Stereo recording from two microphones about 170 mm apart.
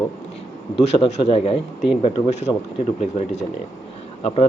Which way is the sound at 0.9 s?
40° left (ahead or behind).